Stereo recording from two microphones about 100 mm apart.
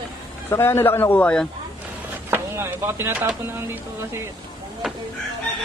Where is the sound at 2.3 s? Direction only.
25° right (ahead or behind).